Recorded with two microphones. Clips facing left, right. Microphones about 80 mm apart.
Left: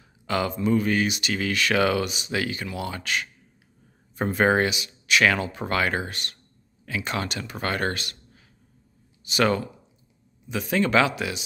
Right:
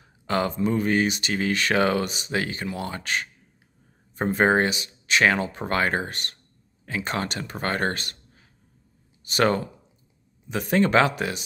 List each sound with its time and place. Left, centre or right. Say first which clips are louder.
0.0 s speech: right 1 dB; right